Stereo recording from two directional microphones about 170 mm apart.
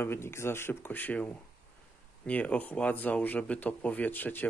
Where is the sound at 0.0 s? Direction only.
15° left (ahead or behind).